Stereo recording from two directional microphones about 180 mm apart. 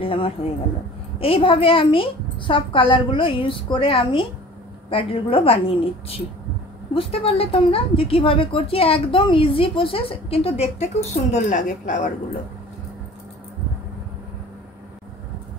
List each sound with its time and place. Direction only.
0.0 s a woman's voice: 30° left (ahead or behind)